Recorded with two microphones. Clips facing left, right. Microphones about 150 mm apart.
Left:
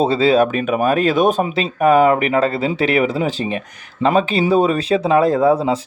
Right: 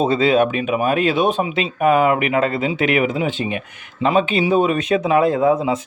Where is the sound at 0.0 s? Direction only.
35° left (ahead or behind).